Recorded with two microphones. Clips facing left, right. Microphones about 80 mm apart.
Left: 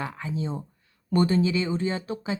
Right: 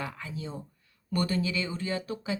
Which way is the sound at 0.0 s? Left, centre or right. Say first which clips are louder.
Left 6 dB; left.